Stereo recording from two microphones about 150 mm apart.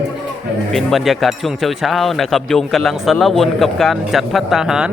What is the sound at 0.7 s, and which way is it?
Speech, centre (ahead or behind).